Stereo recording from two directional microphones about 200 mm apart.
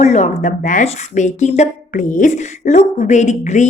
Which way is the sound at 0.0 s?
35° left (ahead or behind).